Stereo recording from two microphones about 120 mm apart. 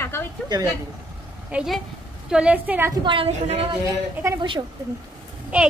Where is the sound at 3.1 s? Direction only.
55° right (ahead or behind).